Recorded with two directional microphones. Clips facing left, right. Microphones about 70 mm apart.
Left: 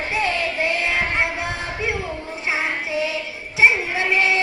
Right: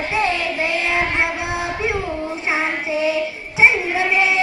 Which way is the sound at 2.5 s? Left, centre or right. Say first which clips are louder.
Right 2 dB; right.